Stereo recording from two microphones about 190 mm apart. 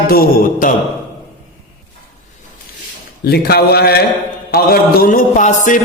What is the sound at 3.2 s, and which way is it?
A man's voice, 55° left (ahead or behind).